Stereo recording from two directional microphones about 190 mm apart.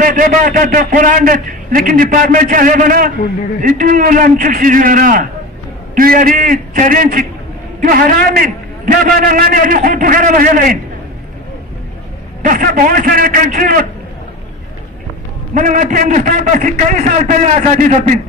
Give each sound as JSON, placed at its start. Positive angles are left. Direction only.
{"t": 0.0, "sound": "a man's voice", "side_deg": -45}
{"t": 12.4, "sound": "a man's voice", "side_deg": -45}
{"t": 15.5, "sound": "a man's voice", "side_deg": -40}